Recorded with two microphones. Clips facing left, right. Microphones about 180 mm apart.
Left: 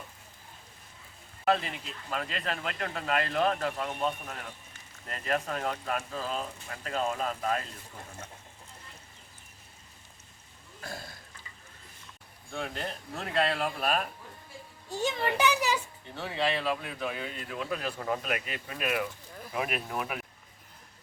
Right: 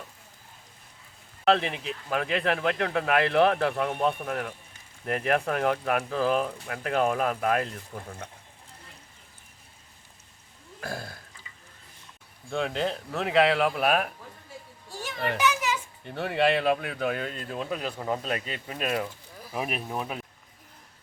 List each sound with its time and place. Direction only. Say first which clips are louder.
1.5 s speech: right 5 dB; 75° right (ahead or behind)
10.8 s burping: right 6 dB; 60° right (ahead or behind)
12.5 s speech: right 8 dB; 75° right (ahead or behind)
15.4 s a child's voice: right 1 dB; 30° left (ahead or behind)
16.0 s speech: right 7 dB; 60° right (ahead or behind)
17.5 s speech: right 1 dB; 25° right (ahead or behind)